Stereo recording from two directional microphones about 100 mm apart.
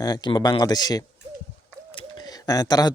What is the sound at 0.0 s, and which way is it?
Speech, 45° left (ahead or behind).